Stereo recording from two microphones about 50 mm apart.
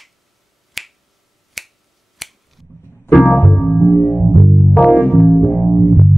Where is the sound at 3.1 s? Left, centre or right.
Left.